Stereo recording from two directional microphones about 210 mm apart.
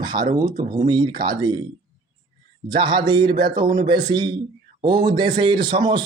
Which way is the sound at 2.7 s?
20° right (ahead or behind).